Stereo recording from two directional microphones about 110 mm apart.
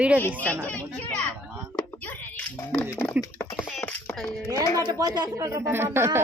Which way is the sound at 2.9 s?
20° left (ahead or behind).